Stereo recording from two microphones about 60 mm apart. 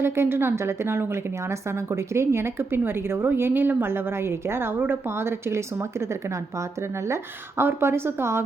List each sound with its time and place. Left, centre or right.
0.0 s a woman's voice: right
7.1 s a woman's voice: right